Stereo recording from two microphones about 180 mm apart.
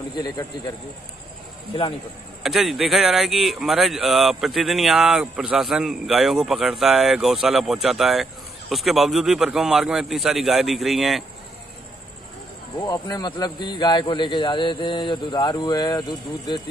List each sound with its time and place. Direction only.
0.1 s a man's voice: 25° left (ahead or behind)
2.4 s speech: centre (ahead or behind)
12.7 s a man's voice: 25° left (ahead or behind)